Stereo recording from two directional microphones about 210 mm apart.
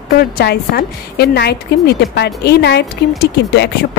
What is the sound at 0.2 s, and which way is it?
A woman's voice, 45° left (ahead or behind).